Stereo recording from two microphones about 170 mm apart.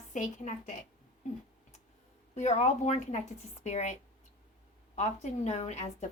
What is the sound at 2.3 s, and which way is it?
A woman's voice, 40° left (ahead or behind).